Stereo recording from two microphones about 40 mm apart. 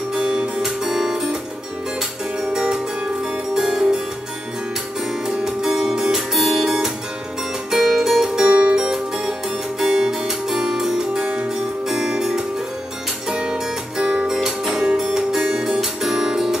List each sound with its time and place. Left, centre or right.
0.6 s music: centre
3.5 s music: centre
5.4 s music: centre
8.5 s music: right
8.7 s music: centre
14.3 s music: centre